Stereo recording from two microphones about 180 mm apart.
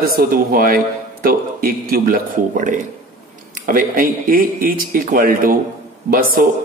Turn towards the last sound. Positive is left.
turn(degrees=-55)  # may be behind; listen again after turning